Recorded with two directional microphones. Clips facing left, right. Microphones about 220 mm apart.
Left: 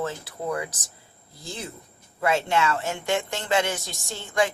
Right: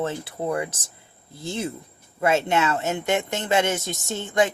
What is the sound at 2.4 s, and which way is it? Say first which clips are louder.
Speech: right 2 dB; 20° right (ahead or behind).